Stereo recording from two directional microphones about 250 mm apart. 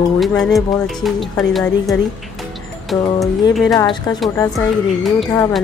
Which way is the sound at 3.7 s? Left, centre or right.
Centre.